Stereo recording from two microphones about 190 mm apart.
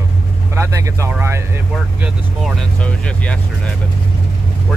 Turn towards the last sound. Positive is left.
turn(degrees=5)  # may be behind; listen again after turning